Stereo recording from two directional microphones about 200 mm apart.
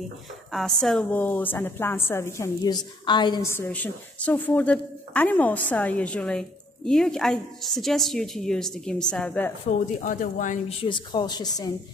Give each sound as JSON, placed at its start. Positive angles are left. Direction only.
{"t": 0.5, "sound": "a woman's voice", "side_deg": 0}
{"t": 9.7, "sound": "speech", "side_deg": 40}
{"t": 10.8, "sound": "speech", "side_deg": 25}